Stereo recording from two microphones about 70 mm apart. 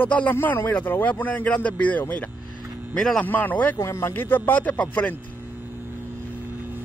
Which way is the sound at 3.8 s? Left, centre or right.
Left.